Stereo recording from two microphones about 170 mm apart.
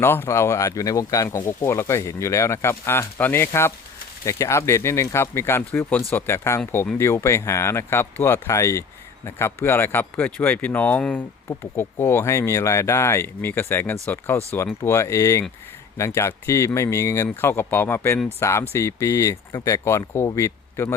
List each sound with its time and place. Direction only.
0.0 s speech: 15° left (ahead or behind)